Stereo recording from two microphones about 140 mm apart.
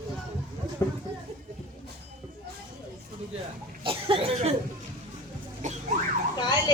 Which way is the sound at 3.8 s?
40° right (ahead or behind).